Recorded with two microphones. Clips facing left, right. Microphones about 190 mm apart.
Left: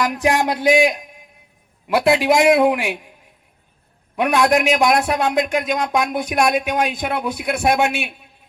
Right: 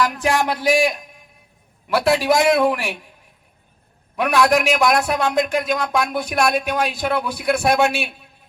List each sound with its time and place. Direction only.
0.0 s speech: 15° left (ahead or behind)
4.2 s a man's voice: 20° left (ahead or behind)